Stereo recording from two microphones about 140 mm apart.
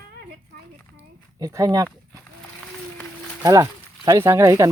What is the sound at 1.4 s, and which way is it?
Speech, 25° right (ahead or behind).